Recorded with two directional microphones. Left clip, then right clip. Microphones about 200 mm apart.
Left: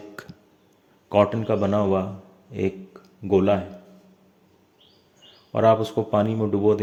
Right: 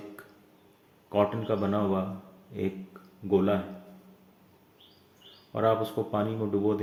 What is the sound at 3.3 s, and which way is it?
Speech, 45° left (ahead or behind).